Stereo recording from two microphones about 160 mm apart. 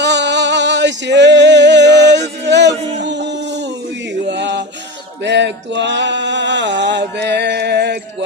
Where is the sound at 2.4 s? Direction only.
90° right.